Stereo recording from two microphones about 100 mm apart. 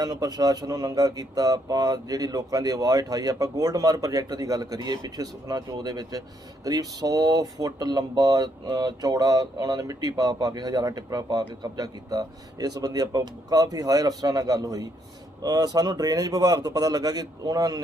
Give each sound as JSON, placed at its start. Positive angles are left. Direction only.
{"t": 0.0, "sound": "speech", "side_deg": -40}